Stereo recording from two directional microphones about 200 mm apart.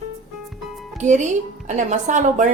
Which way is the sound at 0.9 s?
35° right (ahead or behind).